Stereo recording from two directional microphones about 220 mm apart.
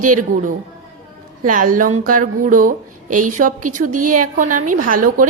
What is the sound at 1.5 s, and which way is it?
Speech, 40° right (ahead or behind).